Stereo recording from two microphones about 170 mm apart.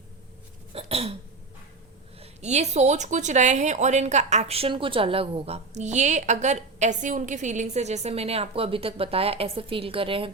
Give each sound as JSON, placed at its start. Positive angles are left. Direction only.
{"t": 0.7, "sound": "hiccup", "side_deg": -35}
{"t": 2.1, "sound": "speech", "side_deg": -40}